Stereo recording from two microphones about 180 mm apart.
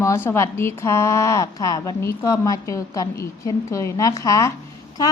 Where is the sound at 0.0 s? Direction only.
15° left (ahead or behind).